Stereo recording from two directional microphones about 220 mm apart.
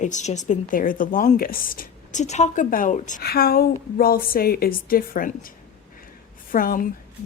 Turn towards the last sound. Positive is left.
turn(degrees=40)  # may be behind; listen again after turning